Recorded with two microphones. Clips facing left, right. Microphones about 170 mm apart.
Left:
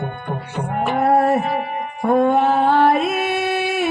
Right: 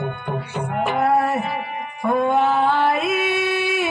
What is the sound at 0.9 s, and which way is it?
Music, 45° left (ahead or behind).